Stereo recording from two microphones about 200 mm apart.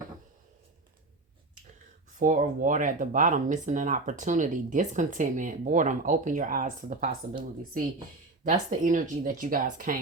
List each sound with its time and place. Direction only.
2.1 s speech: 40° right (ahead or behind)
8.4 s speech: 40° right (ahead or behind)